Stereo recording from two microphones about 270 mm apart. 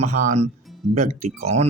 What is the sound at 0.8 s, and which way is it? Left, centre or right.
Speech, right.